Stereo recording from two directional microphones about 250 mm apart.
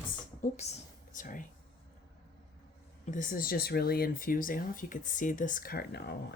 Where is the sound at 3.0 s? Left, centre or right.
Left.